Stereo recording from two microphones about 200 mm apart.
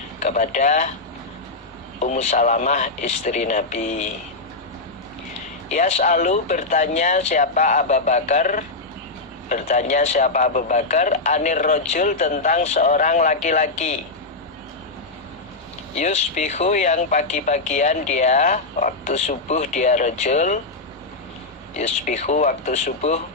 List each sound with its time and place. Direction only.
0.2 s speech: 35° left (ahead or behind)
2.0 s speech: 35° left (ahead or behind)
5.6 s speech: 35° left (ahead or behind)
16.0 s speech: 35° left (ahead or behind)
21.8 s speech: 35° left (ahead or behind)